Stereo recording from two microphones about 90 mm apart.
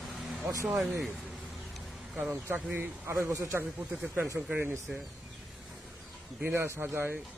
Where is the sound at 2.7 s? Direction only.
20° right (ahead or behind).